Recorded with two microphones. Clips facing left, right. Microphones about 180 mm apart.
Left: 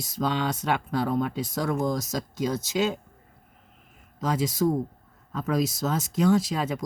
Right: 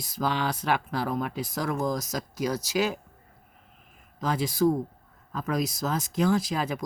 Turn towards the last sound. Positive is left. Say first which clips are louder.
# left 2 dB
turn(degrees=25)  # may be behind; listen again after turning